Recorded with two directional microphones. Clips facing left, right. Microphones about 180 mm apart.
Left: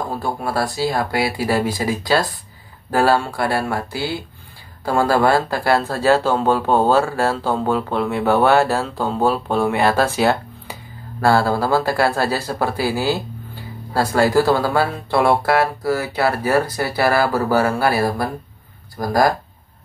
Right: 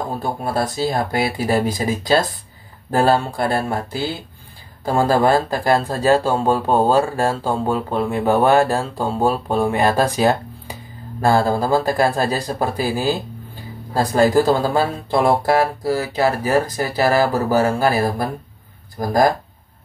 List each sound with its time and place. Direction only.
0.2 s speech: 20° right (ahead or behind)